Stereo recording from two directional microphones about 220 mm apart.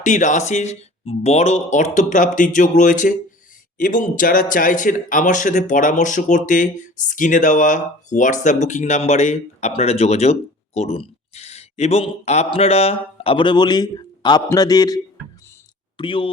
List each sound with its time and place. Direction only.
0.0 s speech: 35° left (ahead or behind)